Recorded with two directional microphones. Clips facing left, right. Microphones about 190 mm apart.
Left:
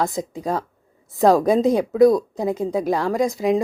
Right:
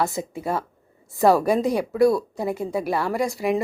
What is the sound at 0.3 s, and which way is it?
Speech, 15° left (ahead or behind).